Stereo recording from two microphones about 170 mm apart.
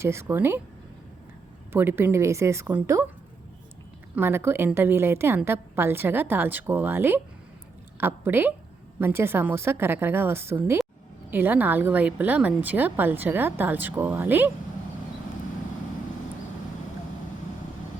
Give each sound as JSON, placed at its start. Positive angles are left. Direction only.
{"t": 0.0, "sound": "a woman's voice", "side_deg": -15}
{"t": 1.7, "sound": "a woman's voice", "side_deg": -15}
{"t": 4.1, "sound": "a woman's voice", "side_deg": -15}